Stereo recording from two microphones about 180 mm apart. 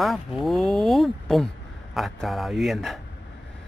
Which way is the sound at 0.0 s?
Centre (ahead or behind).